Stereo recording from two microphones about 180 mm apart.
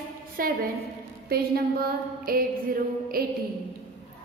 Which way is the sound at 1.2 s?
55° right (ahead or behind).